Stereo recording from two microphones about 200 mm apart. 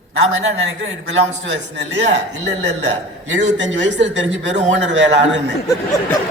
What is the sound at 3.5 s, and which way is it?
A woman's voice, 65° right (ahead or behind).